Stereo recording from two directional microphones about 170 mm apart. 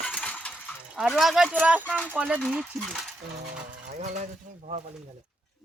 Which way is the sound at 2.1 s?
10° right (ahead or behind).